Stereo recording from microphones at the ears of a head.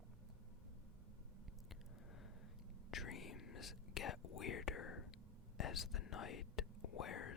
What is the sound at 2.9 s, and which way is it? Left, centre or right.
Whispering, left.